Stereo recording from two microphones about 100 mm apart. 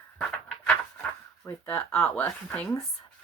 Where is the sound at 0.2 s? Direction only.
10° left (ahead or behind).